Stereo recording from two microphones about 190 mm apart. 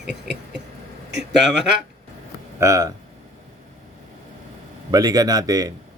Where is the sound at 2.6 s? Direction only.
15° right (ahead or behind).